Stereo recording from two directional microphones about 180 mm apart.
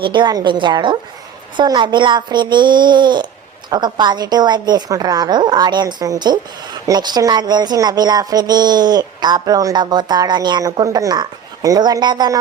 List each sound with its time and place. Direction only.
0.0 s a woman's voice: 25° right (ahead or behind)